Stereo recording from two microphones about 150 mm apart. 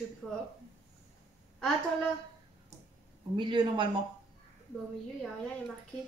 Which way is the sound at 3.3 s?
30° right (ahead or behind).